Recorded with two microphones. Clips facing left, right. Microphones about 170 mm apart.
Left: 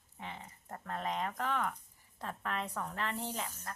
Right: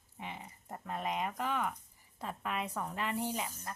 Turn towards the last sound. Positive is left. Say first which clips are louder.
# right 3 dB
turn(degrees=-10)  # may be behind; listen again after turning